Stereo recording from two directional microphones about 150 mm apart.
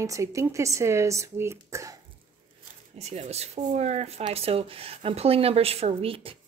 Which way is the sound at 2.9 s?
45° right (ahead or behind).